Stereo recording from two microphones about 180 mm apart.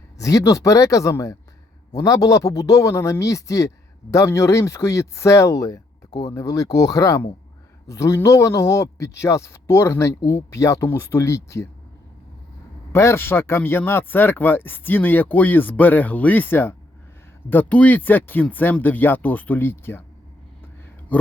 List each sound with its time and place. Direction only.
0.2 s a man's voice: 20° left (ahead or behind)
12.9 s a man's voice: 15° left (ahead or behind)
21.1 s speech: 10° left (ahead or behind)